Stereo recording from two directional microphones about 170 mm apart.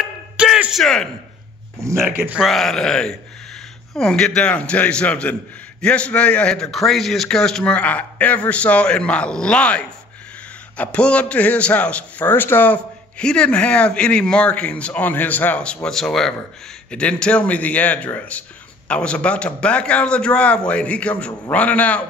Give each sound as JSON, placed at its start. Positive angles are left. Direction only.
{"t": 0.0, "sound": "music", "side_deg": -5}
{"t": 1.8, "sound": "a man's voice", "side_deg": -15}